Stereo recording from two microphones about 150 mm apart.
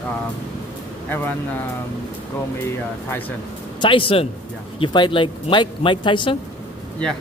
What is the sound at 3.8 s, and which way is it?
Speech, 35° left (ahead or behind).